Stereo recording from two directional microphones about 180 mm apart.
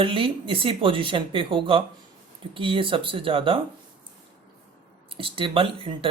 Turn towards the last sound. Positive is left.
turn(degrees=-30)  # may be behind; listen again after turning